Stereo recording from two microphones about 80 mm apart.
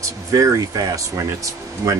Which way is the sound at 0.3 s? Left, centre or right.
Right.